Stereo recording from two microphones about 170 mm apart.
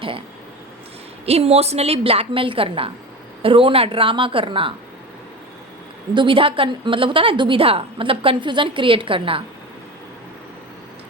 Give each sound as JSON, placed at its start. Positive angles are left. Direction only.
{"t": 1.2, "sound": "a woman's voice", "side_deg": -35}
{"t": 6.1, "sound": "a woman's voice", "side_deg": -30}